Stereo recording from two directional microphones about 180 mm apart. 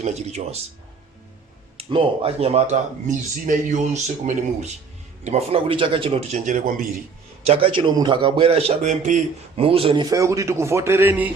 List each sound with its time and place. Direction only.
0.0 s speech: 40° right (ahead or behind)
1.8 s speech: 30° right (ahead or behind); by 6.8 s 45° right (ahead or behind)
7.4 s a man's voice: 30° right (ahead or behind); by 11.3 s 10° right (ahead or behind)